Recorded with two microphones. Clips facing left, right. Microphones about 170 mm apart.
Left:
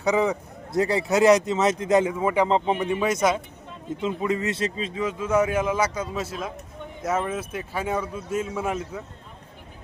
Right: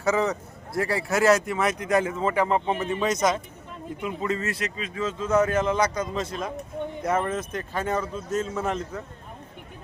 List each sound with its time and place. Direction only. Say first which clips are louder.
0.0 s a man's voice: left 2 dB; 15° left (ahead or behind)
4.9 s speech: even; 10° left (ahead or behind)